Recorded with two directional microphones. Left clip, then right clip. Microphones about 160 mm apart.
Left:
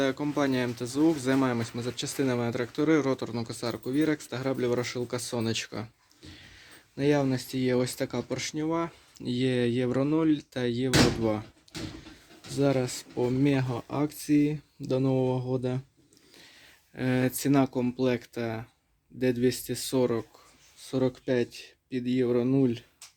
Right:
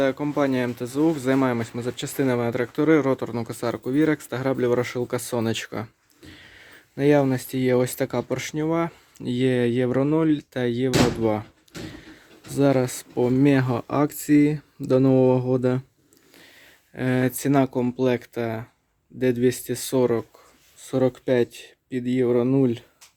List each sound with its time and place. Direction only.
0.0 s speech: 10° right (ahead or behind)
12.5 s speech: 35° right (ahead or behind)
16.9 s speech: 20° right (ahead or behind)